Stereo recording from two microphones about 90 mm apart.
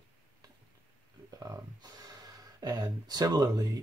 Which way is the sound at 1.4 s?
40° right (ahead or behind).